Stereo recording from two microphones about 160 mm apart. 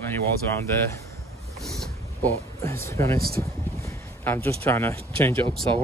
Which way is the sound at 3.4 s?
20° left (ahead or behind).